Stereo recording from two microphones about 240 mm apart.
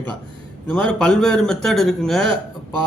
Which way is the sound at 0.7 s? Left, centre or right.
Centre.